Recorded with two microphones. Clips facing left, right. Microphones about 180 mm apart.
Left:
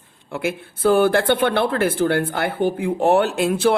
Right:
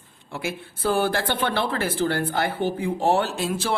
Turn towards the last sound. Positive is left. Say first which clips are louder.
# left 8 dB
turn(degrees=60)  # may be behind; listen again after turning